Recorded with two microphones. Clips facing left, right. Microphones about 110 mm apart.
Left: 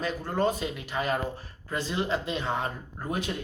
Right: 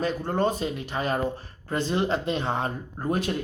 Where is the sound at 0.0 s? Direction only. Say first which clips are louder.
Right 2 dB; 30° right (ahead or behind); by 2.4 s 45° right (ahead or behind).